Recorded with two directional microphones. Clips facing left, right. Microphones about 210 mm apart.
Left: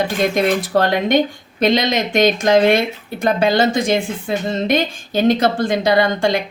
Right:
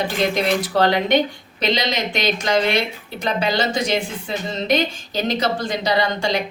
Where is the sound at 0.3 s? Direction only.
50° left (ahead or behind).